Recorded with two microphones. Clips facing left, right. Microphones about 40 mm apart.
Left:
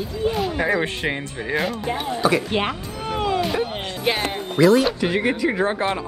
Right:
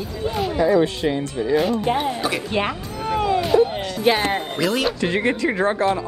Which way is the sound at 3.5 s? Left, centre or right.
Centre.